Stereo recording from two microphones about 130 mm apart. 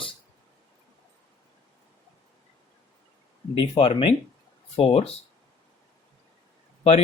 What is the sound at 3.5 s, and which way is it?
Speech, 45° left (ahead or behind).